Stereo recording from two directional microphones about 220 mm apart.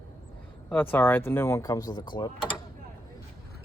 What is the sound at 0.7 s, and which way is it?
Speech, 10° left (ahead or behind).